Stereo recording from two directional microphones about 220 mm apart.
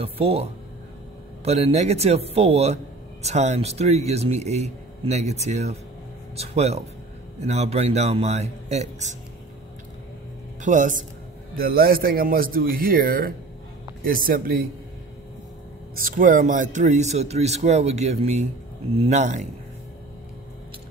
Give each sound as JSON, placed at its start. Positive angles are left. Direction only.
{"t": 0.0, "sound": "speech", "side_deg": -25}
{"t": 10.6, "sound": "a man's voice", "side_deg": -35}
{"t": 15.9, "sound": "a man's voice", "side_deg": -40}